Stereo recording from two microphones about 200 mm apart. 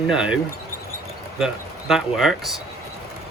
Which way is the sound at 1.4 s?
Centre (ahead or behind).